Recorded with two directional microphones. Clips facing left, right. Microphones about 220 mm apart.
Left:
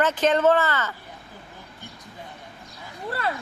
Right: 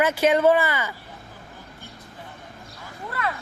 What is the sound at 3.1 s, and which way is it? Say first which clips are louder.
Speech: left 1 dB; 30° left (ahead or behind).